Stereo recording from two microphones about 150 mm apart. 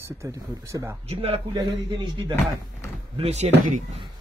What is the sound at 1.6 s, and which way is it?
Speech, 30° right (ahead or behind).